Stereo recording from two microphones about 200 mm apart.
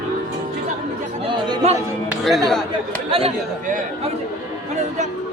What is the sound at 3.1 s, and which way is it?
Speech, 25° right (ahead or behind).